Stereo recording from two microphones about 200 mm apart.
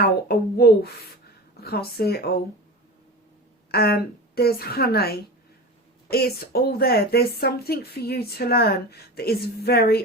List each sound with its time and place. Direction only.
0.3 s speech: 50° left (ahead or behind)
3.7 s speech: 50° left (ahead or behind)